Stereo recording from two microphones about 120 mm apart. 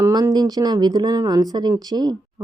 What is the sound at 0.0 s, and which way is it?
Speech, 30° right (ahead or behind).